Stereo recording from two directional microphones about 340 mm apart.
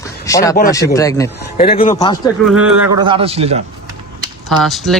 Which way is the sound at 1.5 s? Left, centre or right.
Left.